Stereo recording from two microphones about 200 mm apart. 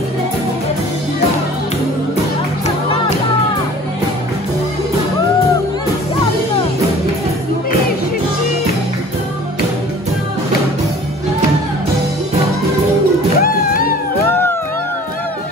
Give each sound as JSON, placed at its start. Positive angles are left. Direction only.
{"t": 13.4, "sound": "music", "side_deg": 45}